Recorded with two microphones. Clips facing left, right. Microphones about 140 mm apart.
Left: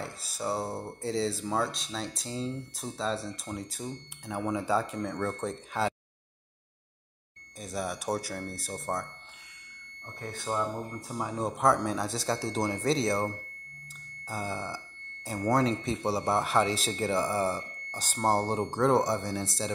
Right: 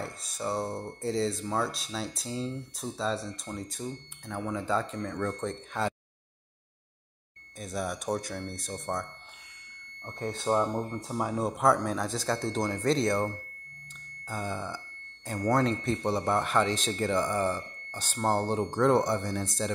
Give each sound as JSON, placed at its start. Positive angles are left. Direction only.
{"t": 0.0, "sound": "a man's voice", "side_deg": 5}
{"t": 7.5, "sound": "speech", "side_deg": 0}
{"t": 10.0, "sound": "speech", "side_deg": -25}
{"t": 11.3, "sound": "a man's voice", "side_deg": 0}
{"t": 17.2, "sound": "speech", "side_deg": 35}
{"t": 18.6, "sound": "speech", "side_deg": 5}